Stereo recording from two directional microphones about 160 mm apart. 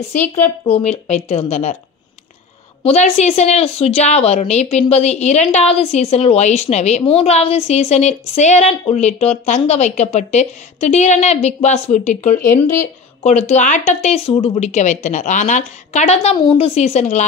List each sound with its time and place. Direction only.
0.7 s speech: 40° left (ahead or behind)
2.8 s a woman's voice: 40° left (ahead or behind)